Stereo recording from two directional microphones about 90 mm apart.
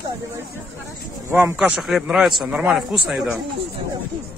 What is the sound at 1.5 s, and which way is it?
Speech, 5° right (ahead or behind).